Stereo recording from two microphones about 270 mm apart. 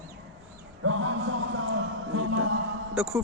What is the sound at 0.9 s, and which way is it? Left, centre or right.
Music, right.